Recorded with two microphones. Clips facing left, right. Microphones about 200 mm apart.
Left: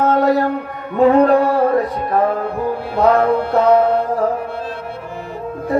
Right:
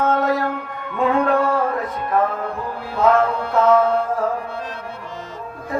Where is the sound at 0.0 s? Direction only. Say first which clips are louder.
Left 5 dB; 35° left (ahead or behind).